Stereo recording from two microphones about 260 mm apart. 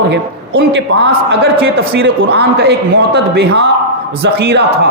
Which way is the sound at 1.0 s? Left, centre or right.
Right.